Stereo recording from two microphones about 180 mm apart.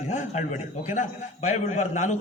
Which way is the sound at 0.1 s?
40° left (ahead or behind).